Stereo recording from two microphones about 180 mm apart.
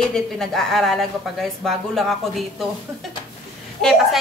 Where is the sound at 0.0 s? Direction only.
Centre (ahead or behind).